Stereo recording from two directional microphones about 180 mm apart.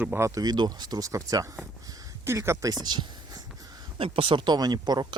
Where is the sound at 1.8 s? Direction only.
20° right (ahead or behind).